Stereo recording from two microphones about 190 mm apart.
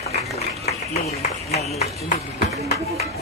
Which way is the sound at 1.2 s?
35° left (ahead or behind).